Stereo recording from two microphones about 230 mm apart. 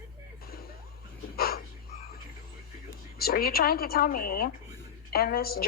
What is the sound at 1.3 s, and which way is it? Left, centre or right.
Dog, left.